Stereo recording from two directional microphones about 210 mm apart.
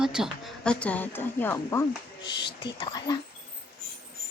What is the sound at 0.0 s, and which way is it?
Speech, centre (ahead or behind).